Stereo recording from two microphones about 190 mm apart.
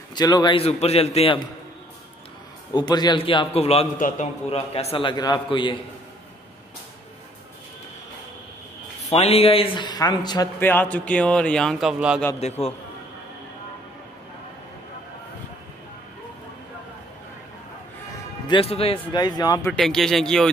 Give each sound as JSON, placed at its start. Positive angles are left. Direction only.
{"t": 0.1, "sound": "a man's voice", "side_deg": 20}
{"t": 2.7, "sound": "a man's voice", "side_deg": 20}
{"t": 9.1, "sound": "a man's voice", "side_deg": 35}
{"t": 10.6, "sound": "a man's voice", "side_deg": 10}
{"t": 12.4, "sound": "a man's voice", "side_deg": 35}
{"t": 18.5, "sound": "a man's voice", "side_deg": 30}
{"t": 19.7, "sound": "a man's voice", "side_deg": 0}